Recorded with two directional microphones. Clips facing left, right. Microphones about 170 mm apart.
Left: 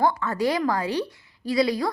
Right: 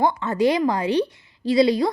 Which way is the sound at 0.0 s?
20° right (ahead or behind).